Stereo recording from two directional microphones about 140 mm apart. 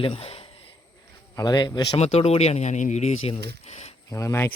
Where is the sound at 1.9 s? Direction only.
50° left (ahead or behind).